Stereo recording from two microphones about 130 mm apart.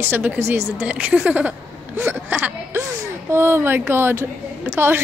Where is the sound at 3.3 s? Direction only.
20° right (ahead or behind).